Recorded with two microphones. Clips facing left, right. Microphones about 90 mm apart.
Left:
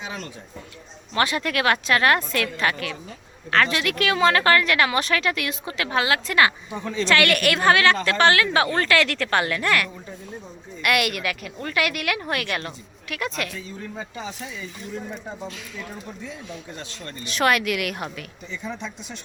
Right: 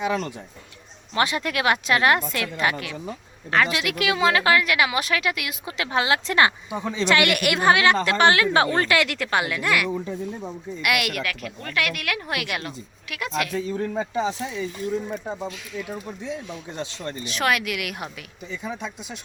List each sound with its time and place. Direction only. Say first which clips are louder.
1.1 s a woman's voice: left 1 dB; 20° right (ahead or behind)
5.7 s a woman's voice: right 1 dB; 20° right (ahead or behind)
6.7 s a woman's voice: even; 15° right (ahead or behind)
13.5 s speech: right 9 dB; 45° right (ahead or behind)
14.0 s a woman's voice: right 8 dB; 30° right (ahead or behind)
16.7 s a woman's voice: right 5 dB; 20° right (ahead or behind)
17.2 s a woman's voice: left 3 dB; centre (ahead or behind)